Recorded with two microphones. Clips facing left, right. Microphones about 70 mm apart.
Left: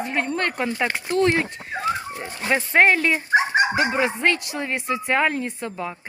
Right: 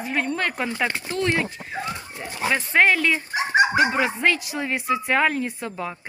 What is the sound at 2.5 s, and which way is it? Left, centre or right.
Speech, centre.